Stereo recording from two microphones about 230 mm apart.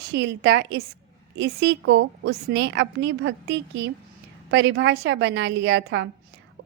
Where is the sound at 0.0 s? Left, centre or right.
Right.